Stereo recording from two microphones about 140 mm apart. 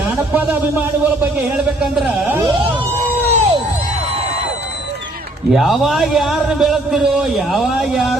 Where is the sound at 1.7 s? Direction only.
Centre (ahead or behind).